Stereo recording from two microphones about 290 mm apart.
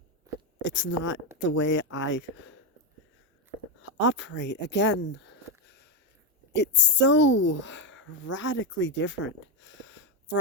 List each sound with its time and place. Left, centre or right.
0.6 s speech: left
3.8 s speech: left